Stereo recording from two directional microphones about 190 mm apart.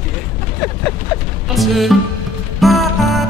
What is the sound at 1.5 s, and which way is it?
Speech, centre (ahead or behind).